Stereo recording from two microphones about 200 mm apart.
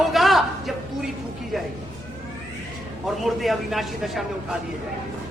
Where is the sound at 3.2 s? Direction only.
Centre (ahead or behind).